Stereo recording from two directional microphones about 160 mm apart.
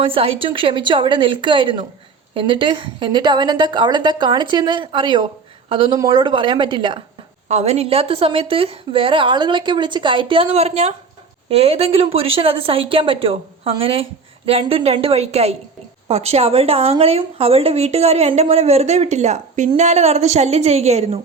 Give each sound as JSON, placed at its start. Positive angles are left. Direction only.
{"t": 0.0, "sound": "a woman's voice", "side_deg": -35}
{"t": 7.4, "sound": "speech", "side_deg": -45}